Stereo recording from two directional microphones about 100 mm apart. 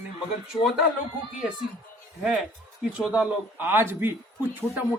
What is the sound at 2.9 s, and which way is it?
A man's voice, 10° right (ahead or behind).